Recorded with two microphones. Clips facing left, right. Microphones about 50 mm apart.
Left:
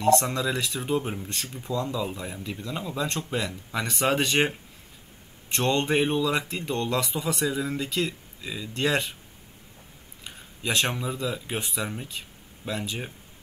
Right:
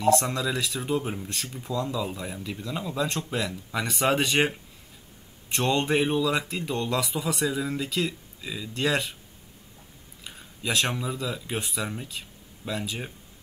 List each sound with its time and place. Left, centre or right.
0.0 s speech: centre
10.2 s speech: centre